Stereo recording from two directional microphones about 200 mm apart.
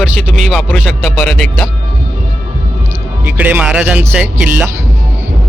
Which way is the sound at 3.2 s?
10° right (ahead or behind).